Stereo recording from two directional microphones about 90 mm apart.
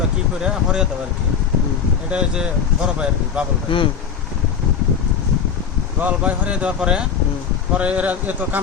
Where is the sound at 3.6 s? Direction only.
70° left (ahead or behind).